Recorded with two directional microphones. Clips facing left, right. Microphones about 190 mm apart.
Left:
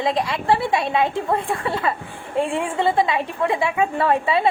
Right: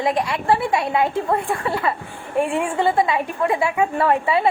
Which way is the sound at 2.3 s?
20° right (ahead or behind).